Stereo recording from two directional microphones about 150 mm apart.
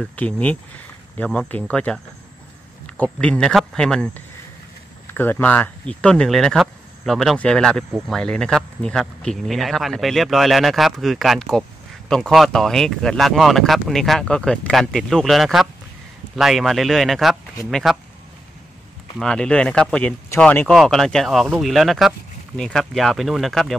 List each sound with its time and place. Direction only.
0.0 s speech: 10° left (ahead or behind)
3.0 s speech: 5° left (ahead or behind)
19.1 s speech: 5° left (ahead or behind)